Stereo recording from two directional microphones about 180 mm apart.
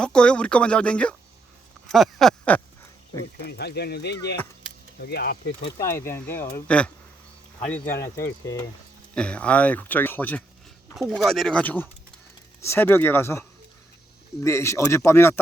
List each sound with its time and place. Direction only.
0.0 s speech: 5° left (ahead or behind)
3.4 s speech: 65° left (ahead or behind)
5.8 s speech: 15° left (ahead or behind)
9.1 s speech: 5° left (ahead or behind)
14.4 s speech: 15° left (ahead or behind)